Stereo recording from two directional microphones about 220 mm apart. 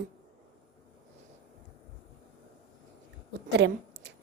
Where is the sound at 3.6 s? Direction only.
55° right (ahead or behind).